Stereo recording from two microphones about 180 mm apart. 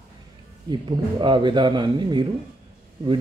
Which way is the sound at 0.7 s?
25° right (ahead or behind).